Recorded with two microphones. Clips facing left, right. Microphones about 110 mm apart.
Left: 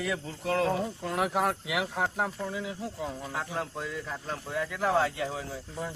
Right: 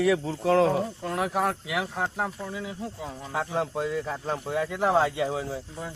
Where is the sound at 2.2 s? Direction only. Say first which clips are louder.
Even; 5° right (ahead or behind).